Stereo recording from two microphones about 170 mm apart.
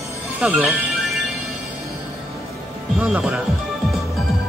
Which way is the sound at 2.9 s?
5° right (ahead or behind).